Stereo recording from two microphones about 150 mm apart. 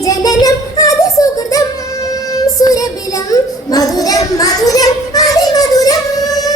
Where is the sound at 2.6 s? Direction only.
25° left (ahead or behind).